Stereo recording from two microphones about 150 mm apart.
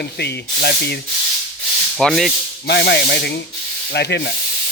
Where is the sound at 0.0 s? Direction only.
90° left.